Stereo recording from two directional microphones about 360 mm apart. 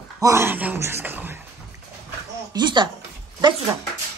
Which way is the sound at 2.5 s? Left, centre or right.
Centre.